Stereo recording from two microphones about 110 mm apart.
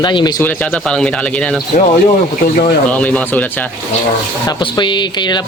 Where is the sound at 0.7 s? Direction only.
5° left (ahead or behind).